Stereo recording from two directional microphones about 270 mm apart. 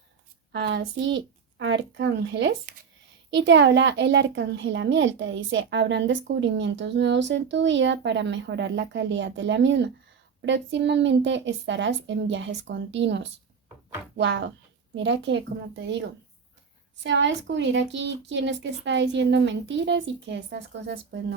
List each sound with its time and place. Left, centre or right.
0.5 s a child's voice: right